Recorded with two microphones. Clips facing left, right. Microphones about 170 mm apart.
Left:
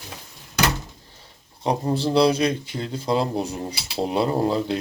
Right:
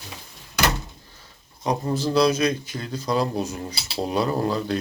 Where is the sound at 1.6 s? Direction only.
30° left (ahead or behind).